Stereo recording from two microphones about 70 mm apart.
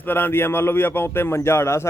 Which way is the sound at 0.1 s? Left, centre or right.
Left.